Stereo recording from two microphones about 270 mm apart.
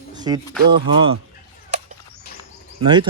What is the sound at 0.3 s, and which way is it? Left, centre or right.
Speech, centre.